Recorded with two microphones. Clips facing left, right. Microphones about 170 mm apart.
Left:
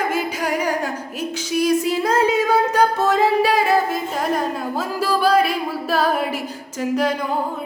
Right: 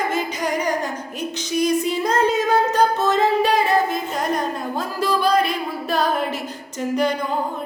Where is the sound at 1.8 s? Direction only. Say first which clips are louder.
Left 1 dB; 5° left (ahead or behind).